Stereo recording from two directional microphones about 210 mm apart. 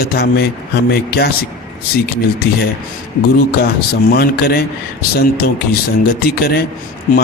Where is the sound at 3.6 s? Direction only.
45° left (ahead or behind).